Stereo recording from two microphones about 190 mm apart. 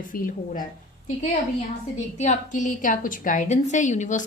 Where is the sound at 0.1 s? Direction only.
45° left (ahead or behind).